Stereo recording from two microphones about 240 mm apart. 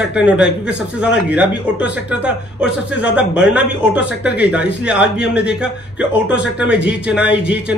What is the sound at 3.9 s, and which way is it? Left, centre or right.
Speech, left.